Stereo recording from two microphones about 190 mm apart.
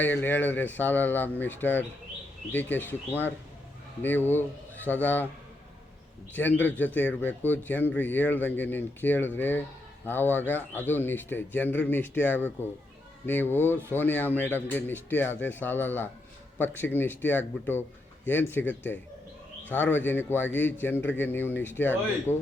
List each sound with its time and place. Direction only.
0.0 s speech: 10° left (ahead or behind)
6.6 s speech: 10° left (ahead or behind)
20.0 s speech: 10° left (ahead or behind)